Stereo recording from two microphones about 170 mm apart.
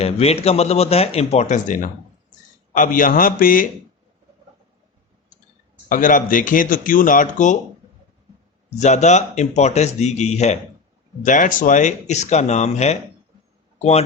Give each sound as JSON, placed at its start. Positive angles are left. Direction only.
{"t": 0.0, "sound": "a man's voice", "side_deg": 35}
{"t": 5.9, "sound": "speech", "side_deg": 50}
{"t": 8.8, "sound": "speech", "side_deg": 45}